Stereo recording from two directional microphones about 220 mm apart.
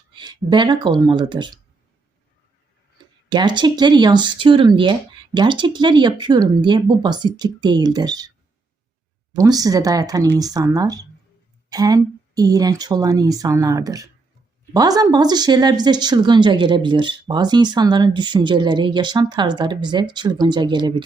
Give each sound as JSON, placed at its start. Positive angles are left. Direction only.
{"t": 0.1, "sound": "speech", "side_deg": -20}
{"t": 3.2, "sound": "speech", "side_deg": -20}
{"t": 9.3, "sound": "speech", "side_deg": -15}